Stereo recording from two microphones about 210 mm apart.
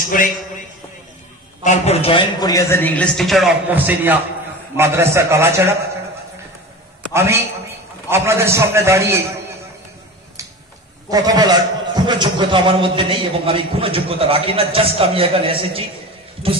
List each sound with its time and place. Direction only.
0.0 s a man's voice: 40° left (ahead or behind)
1.6 s a man's voice: 30° left (ahead or behind); by 5.8 s 10° right (ahead or behind)
8.1 s a man's voice: 10° right (ahead or behind)
11.1 s a man's voice: 15° right (ahead or behind)